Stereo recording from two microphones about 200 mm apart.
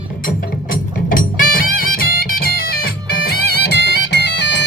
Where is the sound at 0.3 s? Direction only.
45° left (ahead or behind).